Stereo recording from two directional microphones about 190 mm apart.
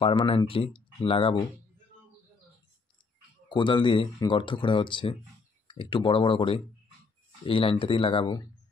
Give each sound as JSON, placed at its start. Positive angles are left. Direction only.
{"t": 0.0, "sound": "speech", "side_deg": 25}
{"t": 3.4, "sound": "speech", "side_deg": 25}